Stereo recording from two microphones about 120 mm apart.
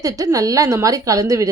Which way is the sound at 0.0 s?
30° right (ahead or behind).